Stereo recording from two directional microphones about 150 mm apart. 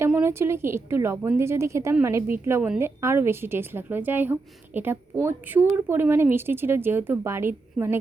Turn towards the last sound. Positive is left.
turn(degrees=-15)  # may be behind; listen again after turning